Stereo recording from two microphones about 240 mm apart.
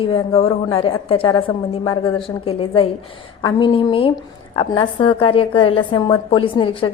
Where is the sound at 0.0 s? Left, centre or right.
Left.